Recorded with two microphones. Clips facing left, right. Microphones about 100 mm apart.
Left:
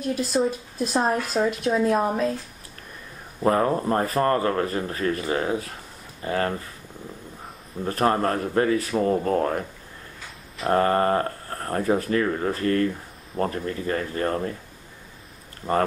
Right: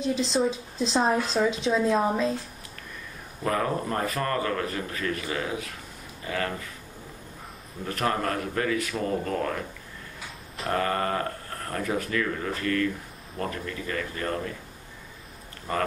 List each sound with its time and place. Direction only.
0.2 s a woman's voice: 10° left (ahead or behind)
3.4 s speech: 35° left (ahead or behind)
7.8 s speech: 35° left (ahead or behind)
10.7 s speech: 35° left (ahead or behind)
15.7 s speech: 35° left (ahead or behind)